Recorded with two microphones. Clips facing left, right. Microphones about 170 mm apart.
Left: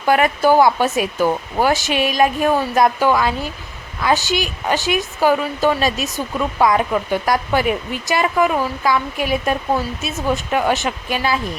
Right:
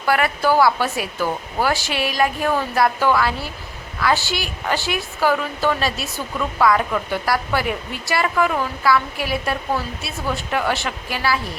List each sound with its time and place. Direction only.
0.0 s a woman's voice: 20° left (ahead or behind)